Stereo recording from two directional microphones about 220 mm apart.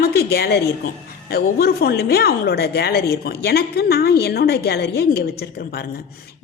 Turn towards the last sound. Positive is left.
turn(degrees=45)  # may be behind; listen again after turning